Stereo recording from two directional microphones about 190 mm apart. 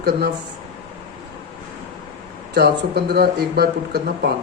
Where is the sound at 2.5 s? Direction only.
60° right (ahead or behind).